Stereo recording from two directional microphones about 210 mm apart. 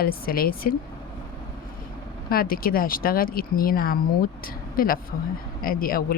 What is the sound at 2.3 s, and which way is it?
Speech, 45° left (ahead or behind).